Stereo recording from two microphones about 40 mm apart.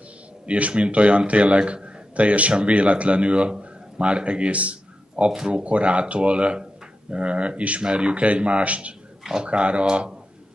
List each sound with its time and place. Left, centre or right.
0.5 s a man's voice: right
9.2 s speech: centre
9.5 s speech: right